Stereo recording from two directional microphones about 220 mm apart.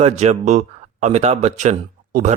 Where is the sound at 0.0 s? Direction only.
30° right (ahead or behind).